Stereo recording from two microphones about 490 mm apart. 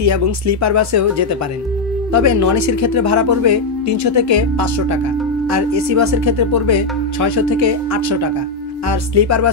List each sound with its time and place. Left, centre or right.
0.0 s speech: right